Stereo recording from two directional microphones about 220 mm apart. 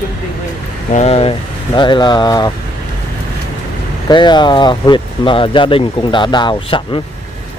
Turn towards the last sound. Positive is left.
turn(degrees=20)  # may be behind; listen again after turning